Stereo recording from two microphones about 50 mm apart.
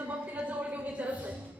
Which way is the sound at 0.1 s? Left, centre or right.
Right.